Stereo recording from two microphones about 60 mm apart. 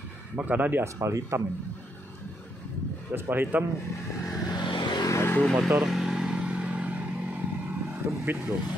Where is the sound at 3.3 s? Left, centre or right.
Right.